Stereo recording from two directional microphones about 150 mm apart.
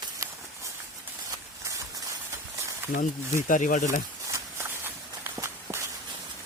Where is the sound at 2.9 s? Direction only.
60° left (ahead or behind).